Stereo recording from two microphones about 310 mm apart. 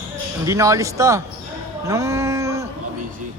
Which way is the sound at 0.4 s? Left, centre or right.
Centre.